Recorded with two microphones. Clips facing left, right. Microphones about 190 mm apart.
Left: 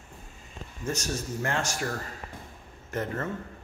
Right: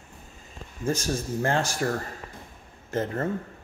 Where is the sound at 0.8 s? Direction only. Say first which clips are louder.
Right 4 dB; 30° right (ahead or behind).